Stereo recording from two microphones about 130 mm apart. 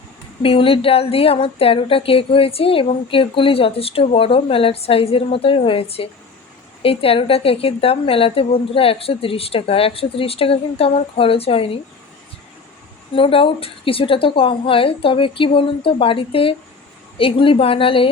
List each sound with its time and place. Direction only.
0.4 s speech: 45° left (ahead or behind)
13.1 s speech: 45° left (ahead or behind)